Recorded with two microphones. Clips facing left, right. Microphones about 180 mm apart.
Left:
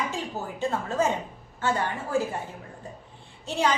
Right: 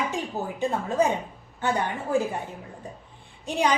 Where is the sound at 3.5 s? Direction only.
15° right (ahead or behind).